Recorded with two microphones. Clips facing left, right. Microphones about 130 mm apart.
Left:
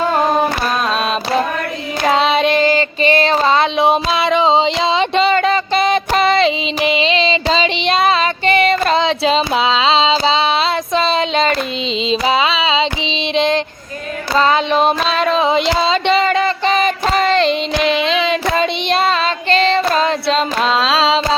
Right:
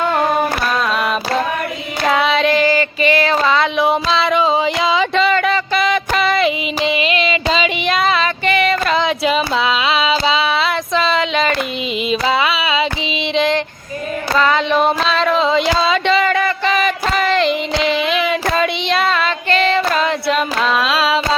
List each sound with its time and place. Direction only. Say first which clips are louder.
0.9 s a sound: left 1 dB; 25° left (ahead or behind)
2.0 s female singing: left 1 dB; 25° left (ahead or behind)
12.0 s carnatic music: left 1 dB; 20° left (ahead or behind)
13.3 s female singing: left 1 dB; 20° left (ahead or behind)
17.9 s child singing: left 1 dB; 25° left (ahead or behind)